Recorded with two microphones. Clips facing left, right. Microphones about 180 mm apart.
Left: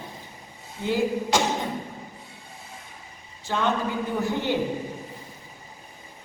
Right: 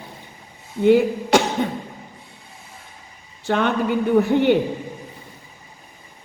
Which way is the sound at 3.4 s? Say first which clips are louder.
Right 5 dB; 65° right (ahead or behind).